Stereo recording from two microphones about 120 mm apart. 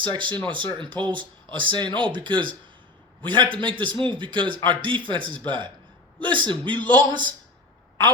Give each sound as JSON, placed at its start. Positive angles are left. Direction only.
{"t": 0.0, "sound": "a man's voice", "side_deg": -40}